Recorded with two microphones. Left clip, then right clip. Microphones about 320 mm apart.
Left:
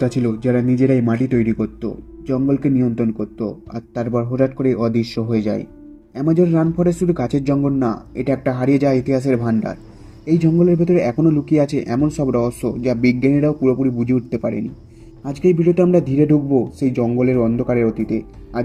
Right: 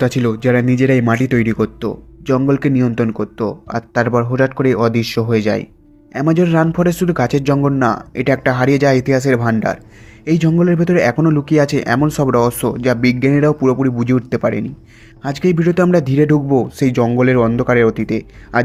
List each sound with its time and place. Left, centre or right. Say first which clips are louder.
0.0 s speech: right 4 dB; right